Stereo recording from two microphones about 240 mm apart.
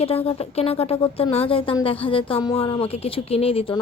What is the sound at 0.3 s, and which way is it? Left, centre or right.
Speech, left.